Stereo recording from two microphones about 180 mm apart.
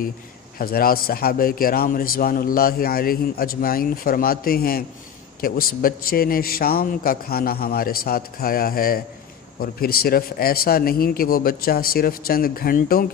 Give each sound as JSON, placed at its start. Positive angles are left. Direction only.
{"t": 0.6, "sound": "a man's voice", "side_deg": 55}